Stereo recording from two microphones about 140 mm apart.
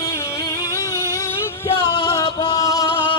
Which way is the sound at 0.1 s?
25° left (ahead or behind).